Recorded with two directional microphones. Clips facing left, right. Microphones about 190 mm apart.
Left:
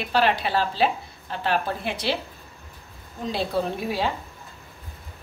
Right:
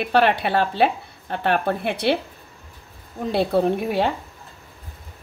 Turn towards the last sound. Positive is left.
turn(degrees=-60)  # may be behind; listen again after turning